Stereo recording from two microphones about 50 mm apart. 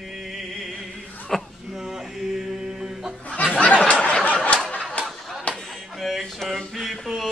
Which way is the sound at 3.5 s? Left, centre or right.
Left.